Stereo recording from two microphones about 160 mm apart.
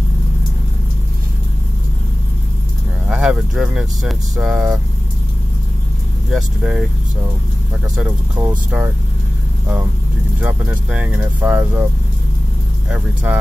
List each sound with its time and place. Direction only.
3.1 s speech: 5° right (ahead or behind)
6.3 s speech: 5° right (ahead or behind)
8.4 s speech: 15° right (ahead or behind)
10.4 s speech: 10° right (ahead or behind)
12.9 s speech: 5° right (ahead or behind)